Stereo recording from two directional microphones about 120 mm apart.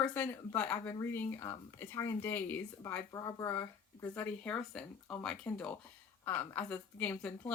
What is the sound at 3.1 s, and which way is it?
Speech, 30° left (ahead or behind).